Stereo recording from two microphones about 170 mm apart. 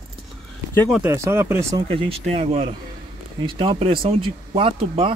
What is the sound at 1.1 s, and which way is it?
Speech, 15° right (ahead or behind).